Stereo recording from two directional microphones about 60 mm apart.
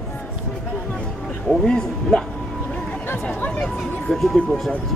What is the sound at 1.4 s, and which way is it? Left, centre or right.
Speech, centre.